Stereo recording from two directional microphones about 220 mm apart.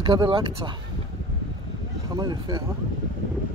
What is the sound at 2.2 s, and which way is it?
Speech, 20° right (ahead or behind).